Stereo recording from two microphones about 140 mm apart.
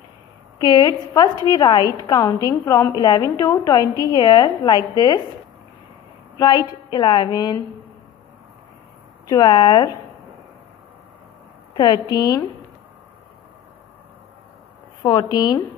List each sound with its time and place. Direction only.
0.6 s a woman's voice: 30° left (ahead or behind)
6.3 s a woman's voice: 30° left (ahead or behind)
9.3 s speech: 35° left (ahead or behind)
11.7 s speech: 30° left (ahead or behind)
15.0 s a woman's voice: 30° left (ahead or behind)